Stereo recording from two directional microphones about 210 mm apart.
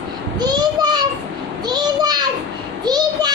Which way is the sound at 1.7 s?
20° right (ahead or behind).